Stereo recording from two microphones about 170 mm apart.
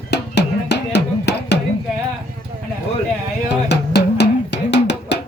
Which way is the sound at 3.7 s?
80° left.